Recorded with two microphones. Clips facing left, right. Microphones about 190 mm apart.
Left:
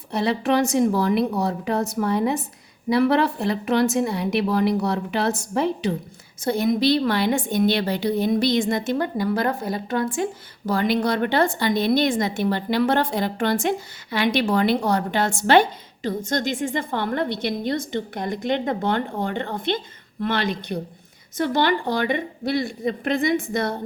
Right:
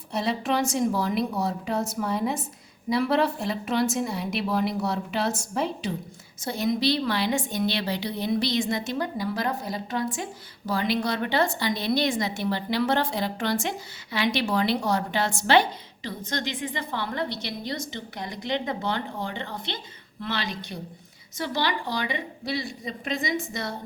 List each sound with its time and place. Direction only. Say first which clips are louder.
0.1 s a woman's voice: left 5 dB; 65° left (ahead or behind)